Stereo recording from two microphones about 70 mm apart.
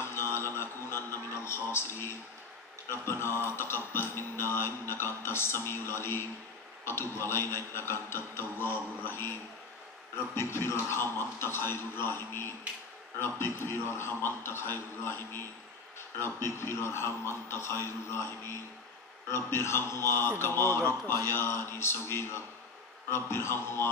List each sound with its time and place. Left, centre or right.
0.1 s music: left
2.9 s speech: left
10.3 s speech: left